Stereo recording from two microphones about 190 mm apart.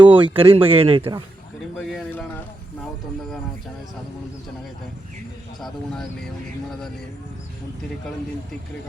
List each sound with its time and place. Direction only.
0.1 s speech: 25° right (ahead or behind)
1.9 s a man's voice: centre (ahead or behind)
5.5 s a man's voice: centre (ahead or behind)